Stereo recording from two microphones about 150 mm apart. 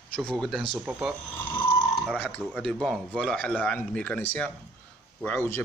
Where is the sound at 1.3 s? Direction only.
15° left (ahead or behind).